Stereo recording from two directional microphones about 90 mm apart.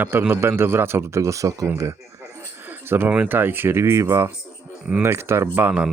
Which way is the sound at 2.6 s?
25° right (ahead or behind).